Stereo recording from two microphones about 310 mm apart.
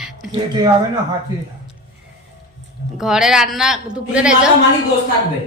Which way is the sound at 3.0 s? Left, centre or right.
Centre.